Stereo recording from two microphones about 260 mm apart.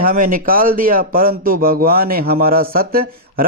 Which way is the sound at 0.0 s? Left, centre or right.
Right.